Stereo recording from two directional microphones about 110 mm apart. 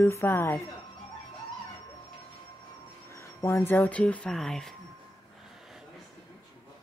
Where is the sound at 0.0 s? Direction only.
20° left (ahead or behind).